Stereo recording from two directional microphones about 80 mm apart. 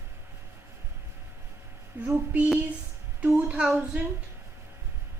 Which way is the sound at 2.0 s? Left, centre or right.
Right.